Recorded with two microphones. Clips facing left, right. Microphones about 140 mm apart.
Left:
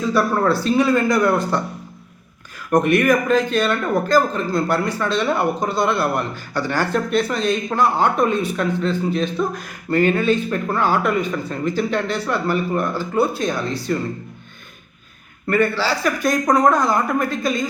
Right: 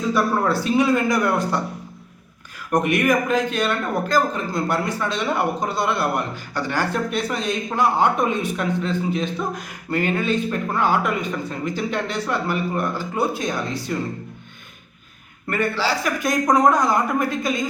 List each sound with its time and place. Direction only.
0.1 s speech: 15° right (ahead or behind)
2.7 s speech: 15° right (ahead or behind)
15.4 s speech: 15° right (ahead or behind)